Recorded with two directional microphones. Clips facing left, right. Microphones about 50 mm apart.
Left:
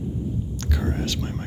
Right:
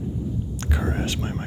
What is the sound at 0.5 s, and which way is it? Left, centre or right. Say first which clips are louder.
Speech: right 2 dB; right.